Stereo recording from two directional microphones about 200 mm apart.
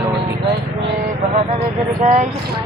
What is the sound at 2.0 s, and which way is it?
Speech, 35° right (ahead or behind).